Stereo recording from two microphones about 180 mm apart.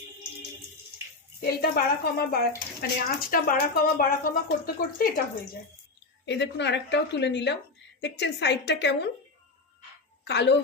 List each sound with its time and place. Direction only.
1.4 s a woman's voice: 60° left (ahead or behind)
6.2 s a woman's voice: 75° left (ahead or behind)
10.2 s a woman's voice: 70° left (ahead or behind)